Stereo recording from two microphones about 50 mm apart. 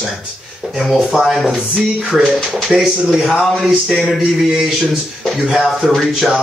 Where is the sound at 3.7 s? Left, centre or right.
Centre.